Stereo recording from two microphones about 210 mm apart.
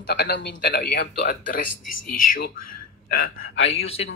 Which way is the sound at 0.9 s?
45° left (ahead or behind).